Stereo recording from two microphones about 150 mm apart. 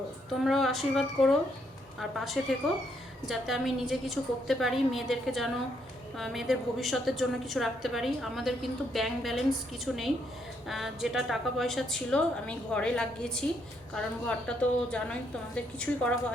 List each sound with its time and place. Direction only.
0.4 s a woman's voice: centre (ahead or behind)